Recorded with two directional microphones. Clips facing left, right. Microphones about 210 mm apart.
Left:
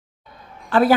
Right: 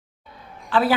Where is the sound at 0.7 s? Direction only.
45° left (ahead or behind).